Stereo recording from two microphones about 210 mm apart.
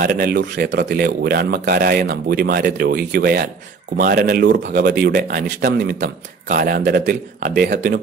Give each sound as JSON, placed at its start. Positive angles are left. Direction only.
{"t": 0.0, "sound": "speech", "side_deg": -45}